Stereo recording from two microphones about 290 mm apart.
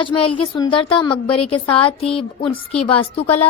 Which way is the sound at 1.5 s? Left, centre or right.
Centre.